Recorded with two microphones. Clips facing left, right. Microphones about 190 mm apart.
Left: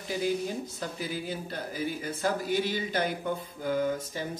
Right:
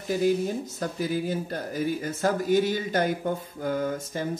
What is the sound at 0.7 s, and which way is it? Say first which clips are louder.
Speech: right 6 dB; 45° right (ahead or behind).